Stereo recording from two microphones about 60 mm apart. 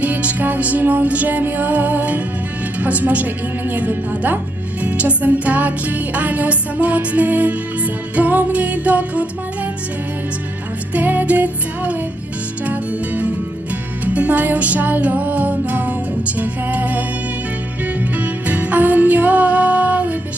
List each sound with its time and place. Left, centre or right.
0.0 s music: right
10.9 s music: right
18.2 s music: right